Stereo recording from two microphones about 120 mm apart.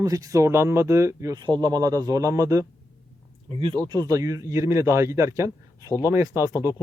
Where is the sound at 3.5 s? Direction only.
50° right (ahead or behind).